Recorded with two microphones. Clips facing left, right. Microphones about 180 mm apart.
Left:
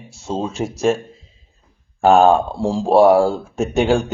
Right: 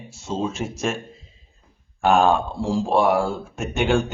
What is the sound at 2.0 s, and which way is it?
A man's voice, 35° left (ahead or behind).